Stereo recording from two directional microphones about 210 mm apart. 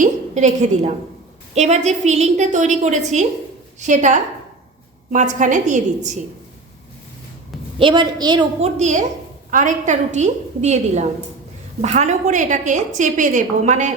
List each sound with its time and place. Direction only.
0.0 s a woman's voice: 35° right (ahead or behind)
7.8 s a woman's voice: 20° right (ahead or behind)
8.6 s a woman's voice: 35° right (ahead or behind)